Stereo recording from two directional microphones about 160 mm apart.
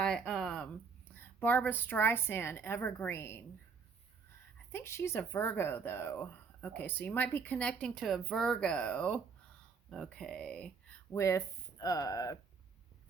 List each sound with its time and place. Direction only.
0.0 s a sound: centre (ahead or behind)
1.1 s speech: 10° left (ahead or behind)
4.7 s speech: 15° left (ahead or behind)
11.1 s speech: 20° left (ahead or behind)